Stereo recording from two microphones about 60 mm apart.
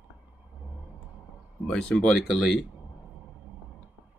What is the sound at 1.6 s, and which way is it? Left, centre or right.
Speech, centre.